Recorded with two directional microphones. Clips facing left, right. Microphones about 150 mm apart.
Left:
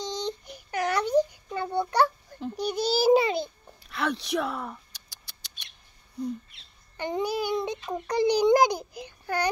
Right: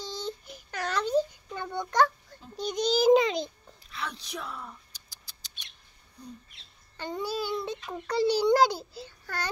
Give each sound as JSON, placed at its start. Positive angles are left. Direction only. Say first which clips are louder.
{"t": 0.0, "sound": "a sound", "louder": "left 4 dB", "side_deg": 20}
{"t": 2.5, "sound": "child singing", "louder": "even", "side_deg": 10}
{"t": 3.9, "sound": "mouse", "louder": "left 10 dB", "side_deg": 65}
{"t": 7.0, "sound": "child singing", "louder": "left 4 dB", "side_deg": 15}
{"t": 7.9, "sound": "a child's voice", "louder": "left 2 dB", "side_deg": 15}